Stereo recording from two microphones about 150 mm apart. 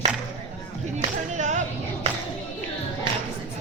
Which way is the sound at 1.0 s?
50° right (ahead or behind).